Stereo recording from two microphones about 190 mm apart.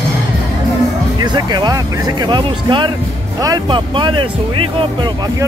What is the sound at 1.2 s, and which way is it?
Music, 25° right (ahead or behind).